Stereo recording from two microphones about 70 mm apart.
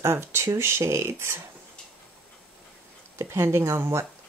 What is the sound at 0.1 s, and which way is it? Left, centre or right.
Speech, right.